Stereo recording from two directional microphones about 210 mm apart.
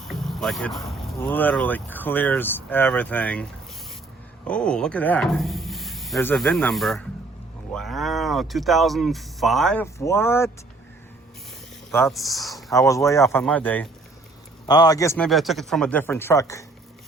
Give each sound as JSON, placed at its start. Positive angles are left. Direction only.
{"t": 0.0, "sound": "speech", "side_deg": 0}
{"t": 4.4, "sound": "speech", "side_deg": 5}
{"t": 12.0, "sound": "speech", "side_deg": 0}
{"t": 12.7, "sound": "speech", "side_deg": 15}
{"t": 14.7, "sound": "speech", "side_deg": 20}
{"t": 15.3, "sound": "speech", "side_deg": 0}